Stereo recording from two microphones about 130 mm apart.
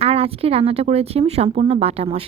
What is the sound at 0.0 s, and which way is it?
Speech, 50° right (ahead or behind).